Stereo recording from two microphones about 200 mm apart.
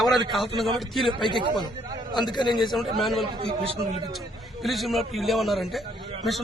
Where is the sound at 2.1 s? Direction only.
20° left (ahead or behind).